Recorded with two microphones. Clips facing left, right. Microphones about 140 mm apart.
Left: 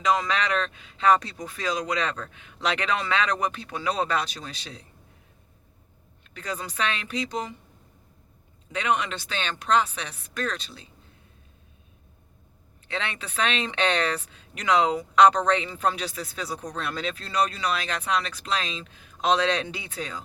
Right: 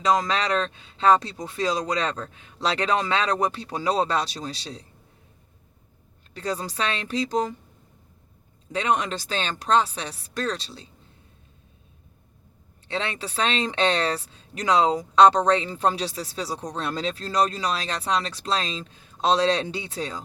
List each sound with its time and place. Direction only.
0.0 s speech: 35° right (ahead or behind)
6.3 s speech: 35° right (ahead or behind)
8.7 s speech: 35° right (ahead or behind)
12.9 s speech: 30° right (ahead or behind)